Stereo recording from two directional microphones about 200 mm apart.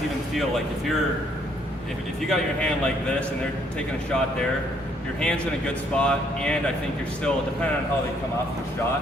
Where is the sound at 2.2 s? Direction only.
5° left (ahead or behind).